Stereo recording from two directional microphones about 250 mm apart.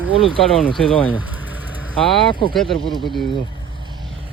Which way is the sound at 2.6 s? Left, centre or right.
Centre.